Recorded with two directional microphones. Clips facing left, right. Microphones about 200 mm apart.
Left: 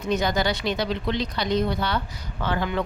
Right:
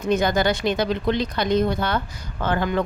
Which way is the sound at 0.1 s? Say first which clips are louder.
Right 4 dB; 50° right (ahead or behind).